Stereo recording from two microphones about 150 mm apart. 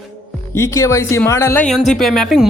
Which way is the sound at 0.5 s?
20° left (ahead or behind).